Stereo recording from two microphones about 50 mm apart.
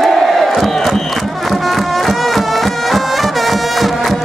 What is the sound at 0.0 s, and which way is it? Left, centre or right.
Crowd, centre.